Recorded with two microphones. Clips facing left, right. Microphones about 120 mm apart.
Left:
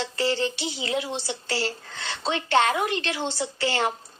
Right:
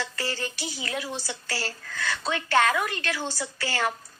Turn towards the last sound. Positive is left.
turn(degrees=25)  # may be behind; listen again after turning